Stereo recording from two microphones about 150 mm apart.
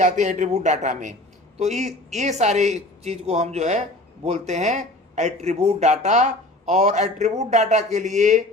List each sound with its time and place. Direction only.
0.0 s speech: 55° right (ahead or behind)